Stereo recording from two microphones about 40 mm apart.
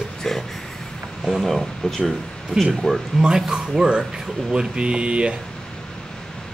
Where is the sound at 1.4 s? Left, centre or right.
Centre.